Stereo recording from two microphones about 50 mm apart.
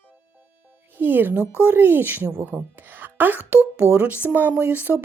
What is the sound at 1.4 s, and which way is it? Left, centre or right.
Speech, left.